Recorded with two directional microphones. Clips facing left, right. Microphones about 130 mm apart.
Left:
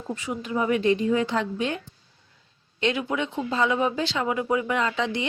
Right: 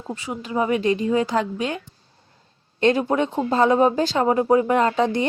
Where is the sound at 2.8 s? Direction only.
40° right (ahead or behind).